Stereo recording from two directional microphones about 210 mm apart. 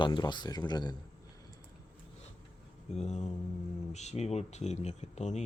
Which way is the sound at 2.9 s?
30° left (ahead or behind).